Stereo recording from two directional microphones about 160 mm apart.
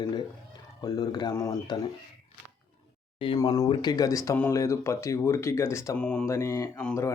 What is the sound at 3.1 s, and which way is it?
Speech, 35° left (ahead or behind).